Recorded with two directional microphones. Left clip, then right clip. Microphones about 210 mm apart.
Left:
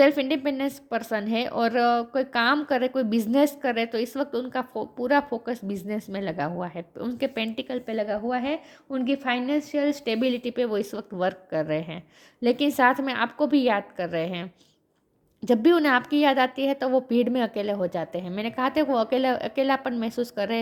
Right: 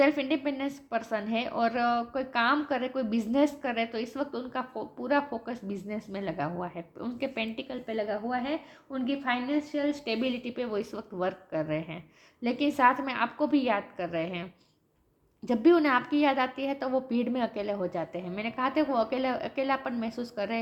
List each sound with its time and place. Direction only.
0.0 s a woman's voice: 55° left (ahead or behind)